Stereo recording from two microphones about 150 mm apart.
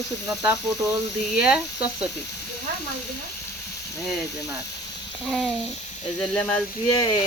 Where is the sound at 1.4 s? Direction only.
5° right (ahead or behind).